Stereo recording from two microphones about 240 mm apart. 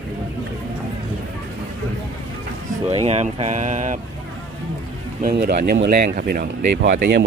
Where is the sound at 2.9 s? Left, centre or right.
Right.